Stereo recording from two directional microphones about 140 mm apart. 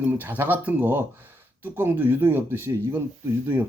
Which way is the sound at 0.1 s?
15° right (ahead or behind).